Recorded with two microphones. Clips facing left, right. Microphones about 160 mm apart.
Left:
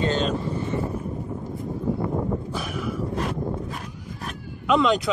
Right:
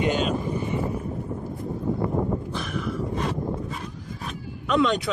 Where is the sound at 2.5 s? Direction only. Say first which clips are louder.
Even; 5° left (ahead or behind).